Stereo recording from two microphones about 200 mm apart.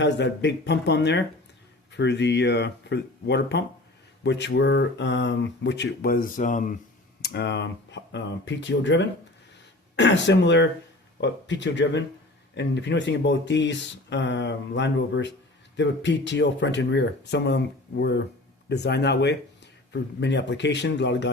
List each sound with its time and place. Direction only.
0.0 s speech: 60° left (ahead or behind); by 6.7 s 40° left (ahead or behind)
7.2 s speech: 55° left (ahead or behind)